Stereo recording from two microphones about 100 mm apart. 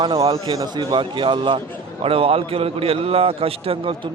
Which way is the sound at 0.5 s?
40° right (ahead or behind).